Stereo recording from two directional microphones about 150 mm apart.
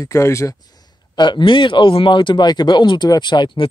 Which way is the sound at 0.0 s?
20° left (ahead or behind).